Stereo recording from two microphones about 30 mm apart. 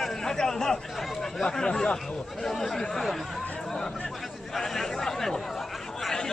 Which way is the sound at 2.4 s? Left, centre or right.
Centre.